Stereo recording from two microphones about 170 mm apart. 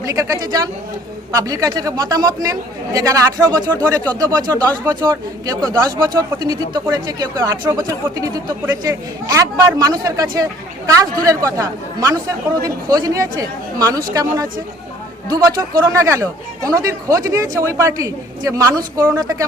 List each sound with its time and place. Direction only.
0.0 s speech: 20° right (ahead or behind)